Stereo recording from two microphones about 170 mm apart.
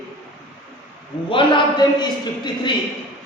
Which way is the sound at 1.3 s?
30° left (ahead or behind).